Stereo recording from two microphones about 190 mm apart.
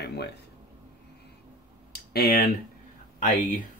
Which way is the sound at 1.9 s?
55° left (ahead or behind).